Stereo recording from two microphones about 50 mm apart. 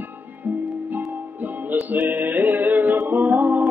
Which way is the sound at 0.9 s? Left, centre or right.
Right.